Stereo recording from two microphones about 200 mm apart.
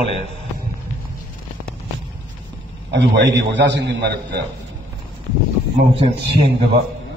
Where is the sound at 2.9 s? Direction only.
60° right (ahead or behind).